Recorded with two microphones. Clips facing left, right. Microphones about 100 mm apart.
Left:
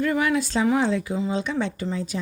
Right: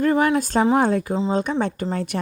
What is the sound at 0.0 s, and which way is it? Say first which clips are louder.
Speech: right 4 dB; 45° right (ahead or behind).